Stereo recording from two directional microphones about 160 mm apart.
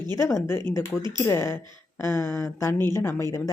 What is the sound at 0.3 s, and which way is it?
Speech, 15° left (ahead or behind).